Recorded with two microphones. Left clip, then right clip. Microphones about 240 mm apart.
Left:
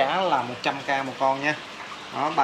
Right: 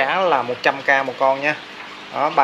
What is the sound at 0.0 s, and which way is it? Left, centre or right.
Speech, centre.